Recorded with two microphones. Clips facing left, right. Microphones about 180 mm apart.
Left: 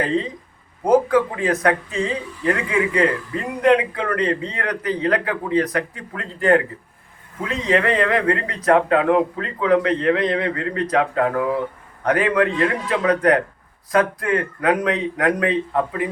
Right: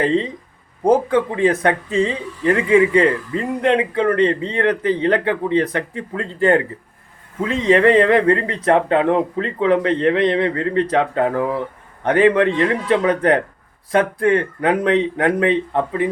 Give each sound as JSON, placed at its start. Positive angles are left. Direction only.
{"t": 0.9, "sound": "speech", "side_deg": -30}